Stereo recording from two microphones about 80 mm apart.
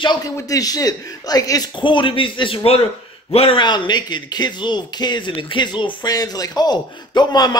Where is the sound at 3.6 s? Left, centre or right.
Left.